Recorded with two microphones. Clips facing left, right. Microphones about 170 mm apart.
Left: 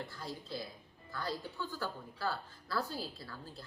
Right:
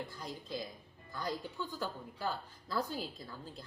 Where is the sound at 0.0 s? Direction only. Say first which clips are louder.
Even; 15° right (ahead or behind).